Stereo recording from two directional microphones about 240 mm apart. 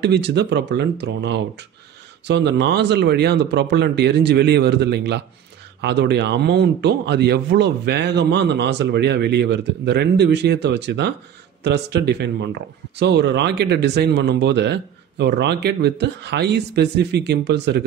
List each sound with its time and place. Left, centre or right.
0.0 s speech: right